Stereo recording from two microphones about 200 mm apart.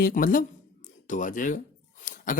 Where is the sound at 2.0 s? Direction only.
40° left (ahead or behind).